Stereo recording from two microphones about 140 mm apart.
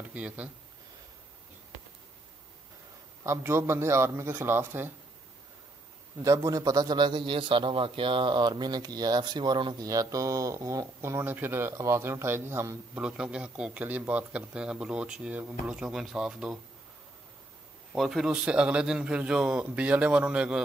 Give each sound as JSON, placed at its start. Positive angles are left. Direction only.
{"t": 0.1, "sound": "speech", "side_deg": -10}
{"t": 3.3, "sound": "a man's voice", "side_deg": -20}
{"t": 6.2, "sound": "a man's voice", "side_deg": -25}
{"t": 13.0, "sound": "a man's voice", "side_deg": -5}
{"t": 17.9, "sound": "a man's voice", "side_deg": 0}